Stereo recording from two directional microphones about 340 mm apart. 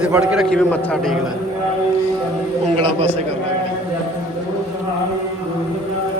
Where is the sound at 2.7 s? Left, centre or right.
Centre.